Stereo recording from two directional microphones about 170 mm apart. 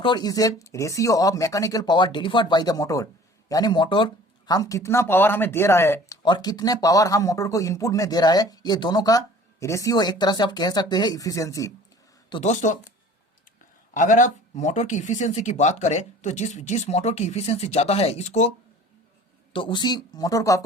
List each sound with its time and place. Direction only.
0.0 s speech: 25° left (ahead or behind)
6.2 s speech: 25° left (ahead or behind)
12.4 s speech: 45° left (ahead or behind)
13.9 s speech: 45° left (ahead or behind)
19.5 s speech: 30° left (ahead or behind)